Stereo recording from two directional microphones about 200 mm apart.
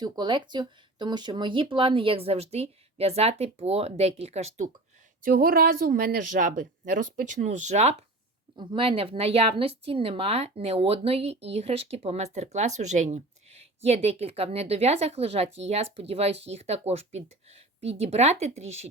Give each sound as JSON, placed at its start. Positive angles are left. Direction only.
{"t": 0.0, "sound": "speech", "side_deg": -25}
{"t": 5.2, "sound": "speech", "side_deg": -50}